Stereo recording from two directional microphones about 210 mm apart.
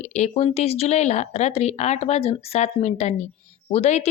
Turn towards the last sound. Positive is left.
turn(degrees=30)  # may be behind; listen again after turning